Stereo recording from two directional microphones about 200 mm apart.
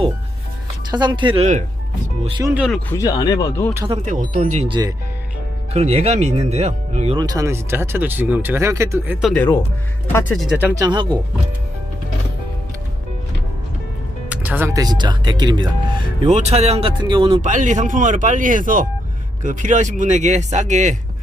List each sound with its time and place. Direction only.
0.9 s speech: 20° right (ahead or behind)
2.6 s speech: centre (ahead or behind)
2.9 s speech: 15° left (ahead or behind)
3.8 s speech: 35° right (ahead or behind)
7.2 s speech: 15° right (ahead or behind)
9.2 s speech: 5° left (ahead or behind)
10.8 s speech: 20° right (ahead or behind)
14.3 s speech: 10° right (ahead or behind); by 17.3 s 25° right (ahead or behind)
17.4 s speech: 40° right (ahead or behind)